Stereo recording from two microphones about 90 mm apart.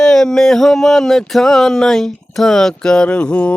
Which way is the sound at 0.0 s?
5° left (ahead or behind).